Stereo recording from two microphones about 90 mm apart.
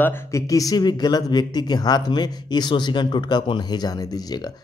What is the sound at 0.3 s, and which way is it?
Speech, 40° left (ahead or behind).